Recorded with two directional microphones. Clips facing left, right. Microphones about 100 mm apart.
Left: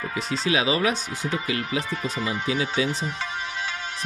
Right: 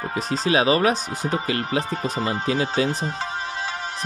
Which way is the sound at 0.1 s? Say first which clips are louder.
Right 4 dB; 40° right (ahead or behind).